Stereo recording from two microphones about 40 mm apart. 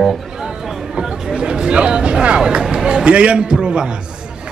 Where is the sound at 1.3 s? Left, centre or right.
Right.